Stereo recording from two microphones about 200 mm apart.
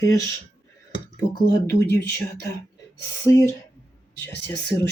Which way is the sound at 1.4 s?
15° left (ahead or behind).